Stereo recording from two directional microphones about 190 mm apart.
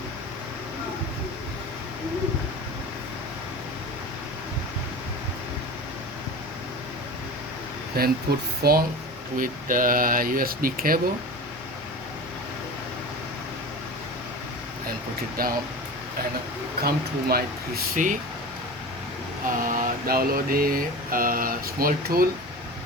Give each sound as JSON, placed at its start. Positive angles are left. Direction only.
{"t": 8.0, "sound": "mantra", "side_deg": -55}
{"t": 8.6, "sound": "speech", "side_deg": -55}
{"t": 9.4, "sound": "mantra", "side_deg": -45}
{"t": 15.4, "sound": "mantra", "side_deg": -50}
{"t": 16.8, "sound": "mantra", "side_deg": -55}
{"t": 17.9, "sound": "mantra", "side_deg": -45}
{"t": 19.6, "sound": "mantra", "side_deg": -50}